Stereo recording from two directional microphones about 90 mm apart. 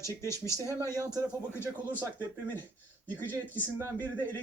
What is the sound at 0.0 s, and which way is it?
Speech, 30° left (ahead or behind).